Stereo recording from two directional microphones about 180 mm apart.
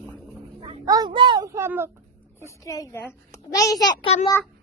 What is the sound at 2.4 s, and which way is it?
A child's voice, 15° left (ahead or behind).